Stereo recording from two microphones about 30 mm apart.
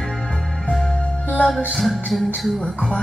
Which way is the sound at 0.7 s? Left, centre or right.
Centre.